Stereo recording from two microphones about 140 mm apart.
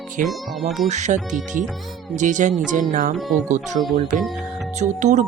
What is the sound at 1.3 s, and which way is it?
Speech, 65° right (ahead or behind).